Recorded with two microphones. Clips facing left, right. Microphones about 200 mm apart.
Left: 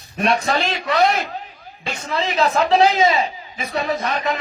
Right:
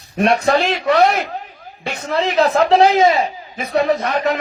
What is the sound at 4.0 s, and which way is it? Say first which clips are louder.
Speech: right 4 dB; 45° right (ahead or behind).